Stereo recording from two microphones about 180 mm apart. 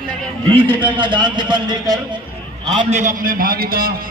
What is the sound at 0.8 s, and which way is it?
A man's voice, 25° right (ahead or behind).